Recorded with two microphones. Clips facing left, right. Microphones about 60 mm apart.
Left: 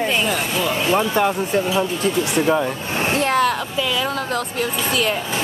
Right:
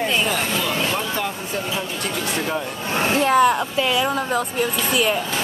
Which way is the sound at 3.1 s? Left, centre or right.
Centre.